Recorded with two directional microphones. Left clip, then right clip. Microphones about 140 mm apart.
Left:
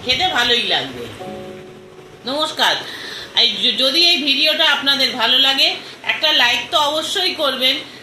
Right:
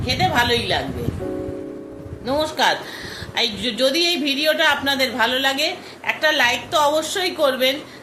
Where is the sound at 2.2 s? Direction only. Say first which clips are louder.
Left 1 dB; 20° right (ahead or behind).